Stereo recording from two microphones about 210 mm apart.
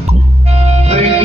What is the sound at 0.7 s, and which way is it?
Music, 30° right (ahead or behind).